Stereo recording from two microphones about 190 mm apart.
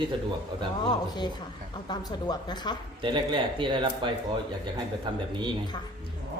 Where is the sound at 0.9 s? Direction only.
25° left (ahead or behind).